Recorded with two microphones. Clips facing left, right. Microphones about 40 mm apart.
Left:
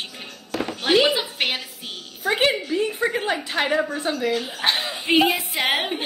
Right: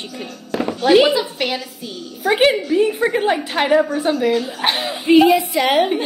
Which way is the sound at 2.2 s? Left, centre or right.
Centre.